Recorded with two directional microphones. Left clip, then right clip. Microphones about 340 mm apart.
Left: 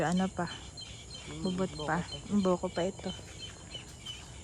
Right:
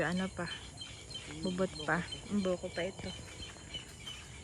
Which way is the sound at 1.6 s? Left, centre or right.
Centre.